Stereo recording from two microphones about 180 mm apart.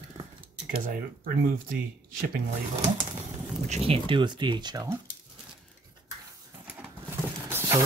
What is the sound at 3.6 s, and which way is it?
Speech, 35° right (ahead or behind).